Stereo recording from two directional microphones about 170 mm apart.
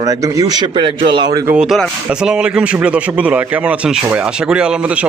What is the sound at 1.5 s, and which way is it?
Speech, 5° right (ahead or behind).